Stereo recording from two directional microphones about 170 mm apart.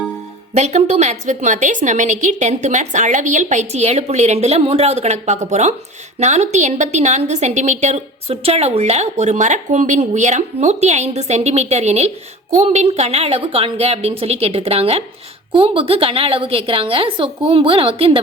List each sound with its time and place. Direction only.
0.5 s a woman's voice: 40° right (ahead or behind)